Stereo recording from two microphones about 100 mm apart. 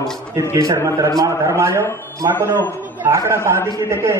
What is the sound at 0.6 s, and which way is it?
A man's voice, 30° right (ahead or behind).